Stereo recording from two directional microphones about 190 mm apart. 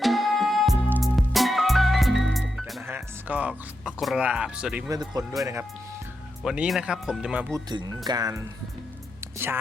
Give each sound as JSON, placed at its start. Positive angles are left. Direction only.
{"t": 0.0, "sound": "music", "side_deg": 0}
{"t": 3.8, "sound": "speech", "side_deg": 0}
{"t": 4.9, "sound": "speech", "side_deg": -20}
{"t": 6.4, "sound": "speech", "side_deg": -5}
{"t": 7.5, "sound": "speech", "side_deg": -20}